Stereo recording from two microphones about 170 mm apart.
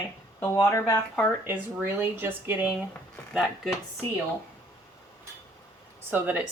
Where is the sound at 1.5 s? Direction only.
15° right (ahead or behind).